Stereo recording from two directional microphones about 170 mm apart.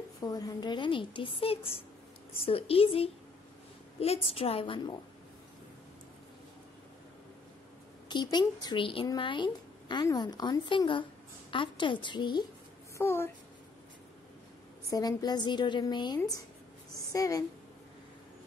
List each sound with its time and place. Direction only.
0.2 s a woman's voice: 20° left (ahead or behind)
8.1 s speech: 25° left (ahead or behind)
12.9 s a woman's voice: 15° left (ahead or behind)
14.9 s speech: 20° left (ahead or behind)